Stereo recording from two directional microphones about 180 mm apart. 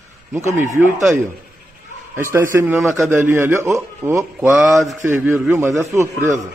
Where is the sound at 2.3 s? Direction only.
15° right (ahead or behind).